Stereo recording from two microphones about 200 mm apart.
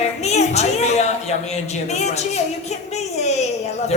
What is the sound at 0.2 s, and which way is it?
A woman's voice, 35° left (ahead or behind).